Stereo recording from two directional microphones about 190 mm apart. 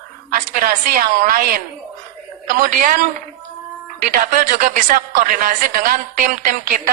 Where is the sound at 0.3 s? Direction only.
45° right (ahead or behind).